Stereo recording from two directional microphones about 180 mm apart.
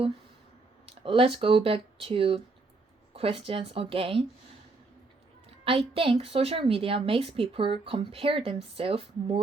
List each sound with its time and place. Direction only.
0.9 s a woman's voice: 30° right (ahead or behind)
5.6 s a woman's voice: 30° right (ahead or behind)